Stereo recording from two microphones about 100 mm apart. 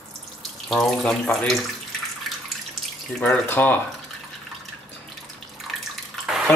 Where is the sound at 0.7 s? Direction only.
5° left (ahead or behind).